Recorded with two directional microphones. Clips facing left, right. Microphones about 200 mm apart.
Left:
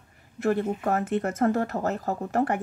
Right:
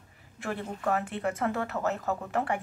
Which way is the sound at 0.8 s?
40° left (ahead or behind).